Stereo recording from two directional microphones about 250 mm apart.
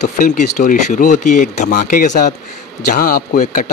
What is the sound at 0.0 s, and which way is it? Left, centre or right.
Speech, left.